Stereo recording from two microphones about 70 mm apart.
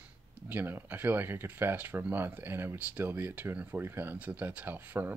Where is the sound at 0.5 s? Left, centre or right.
Right.